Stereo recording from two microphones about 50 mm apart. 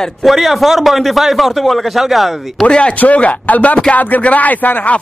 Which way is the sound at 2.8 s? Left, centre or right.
Left.